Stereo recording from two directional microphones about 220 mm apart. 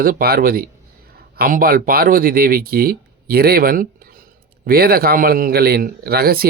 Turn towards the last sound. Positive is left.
turn(degrees=-45)  # may be behind; listen again after turning